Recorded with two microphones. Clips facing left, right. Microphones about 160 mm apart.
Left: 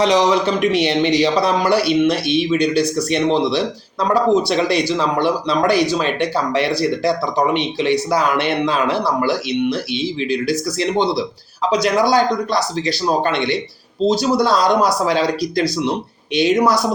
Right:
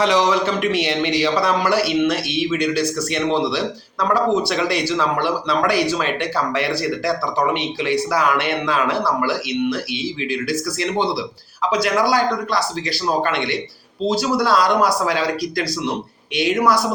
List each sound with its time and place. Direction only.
0.0 s speech: 20° left (ahead or behind)